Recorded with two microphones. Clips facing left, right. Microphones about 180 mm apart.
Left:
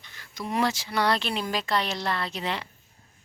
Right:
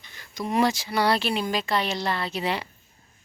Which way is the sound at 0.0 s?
15° right (ahead or behind).